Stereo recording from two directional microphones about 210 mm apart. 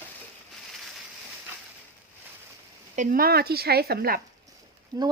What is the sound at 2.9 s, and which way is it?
Speech, 40° right (ahead or behind).